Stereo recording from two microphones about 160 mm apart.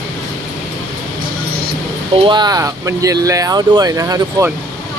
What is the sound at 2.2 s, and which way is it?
Speech, 25° right (ahead or behind).